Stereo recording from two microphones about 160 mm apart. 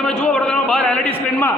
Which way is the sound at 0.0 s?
5° left (ahead or behind).